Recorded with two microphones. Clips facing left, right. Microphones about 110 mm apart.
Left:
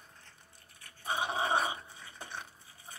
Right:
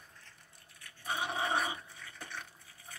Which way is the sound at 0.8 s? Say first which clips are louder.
Left 2 dB; 25° left (ahead or behind).